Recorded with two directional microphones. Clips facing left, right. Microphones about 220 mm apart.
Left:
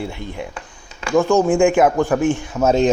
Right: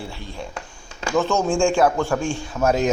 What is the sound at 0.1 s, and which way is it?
A man's voice, 15° left (ahead or behind).